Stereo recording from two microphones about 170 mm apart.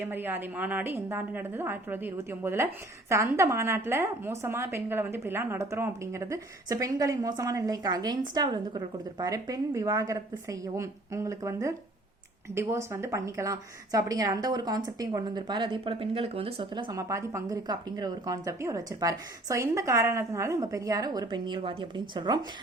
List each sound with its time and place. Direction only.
0.0 s a woman's voice: 10° right (ahead or behind)